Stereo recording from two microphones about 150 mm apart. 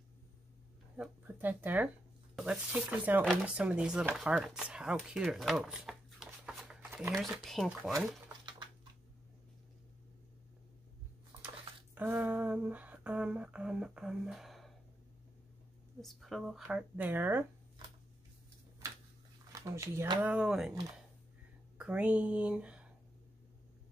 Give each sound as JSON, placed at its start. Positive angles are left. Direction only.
{"t": 0.9, "sound": "speech", "side_deg": -10}
{"t": 11.4, "sound": "a sound", "side_deg": -10}
{"t": 16.0, "sound": "speech", "side_deg": 0}
{"t": 18.8, "sound": "a sound", "side_deg": -20}
{"t": 19.5, "sound": "speech", "side_deg": -20}
{"t": 21.7, "sound": "speech", "side_deg": -10}